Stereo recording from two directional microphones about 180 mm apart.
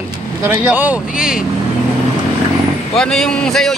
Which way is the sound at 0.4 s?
10° right (ahead or behind).